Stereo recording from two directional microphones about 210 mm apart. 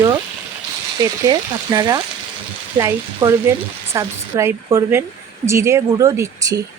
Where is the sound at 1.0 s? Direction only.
20° right (ahead or behind).